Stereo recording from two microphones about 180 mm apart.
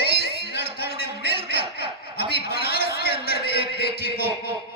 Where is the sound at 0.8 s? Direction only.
65° left (ahead or behind).